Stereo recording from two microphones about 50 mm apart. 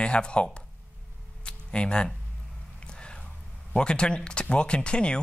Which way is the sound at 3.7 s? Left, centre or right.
Centre.